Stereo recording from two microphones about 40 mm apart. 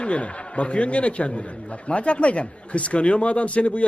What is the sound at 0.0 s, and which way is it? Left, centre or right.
A man's voice, left.